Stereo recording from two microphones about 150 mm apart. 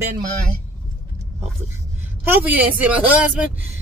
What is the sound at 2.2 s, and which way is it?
A woman's voice, 15° right (ahead or behind).